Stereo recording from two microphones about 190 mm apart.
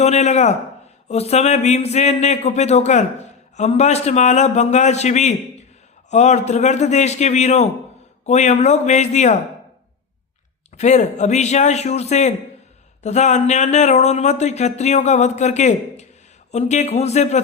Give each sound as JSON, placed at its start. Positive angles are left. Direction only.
{"t": 0.0, "sound": "speech", "side_deg": 35}
{"t": 10.8, "sound": "speech", "side_deg": 40}